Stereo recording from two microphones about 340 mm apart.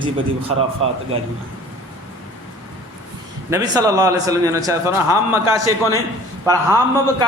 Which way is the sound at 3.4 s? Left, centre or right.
Centre.